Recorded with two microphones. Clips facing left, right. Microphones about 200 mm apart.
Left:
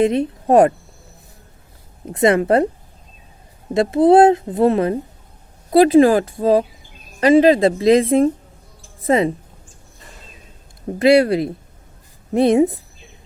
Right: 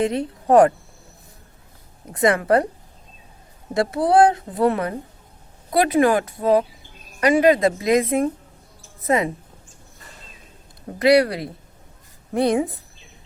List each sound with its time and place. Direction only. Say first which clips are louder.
0.0 s a child's voice: left 5 dB; 20° left (ahead or behind)
2.1 s a child's voice: left 3 dB; 25° left (ahead or behind)
3.8 s a child's voice: left 5 dB; 20° left (ahead or behind)
11.0 s a child's voice: left 3 dB; 25° left (ahead or behind)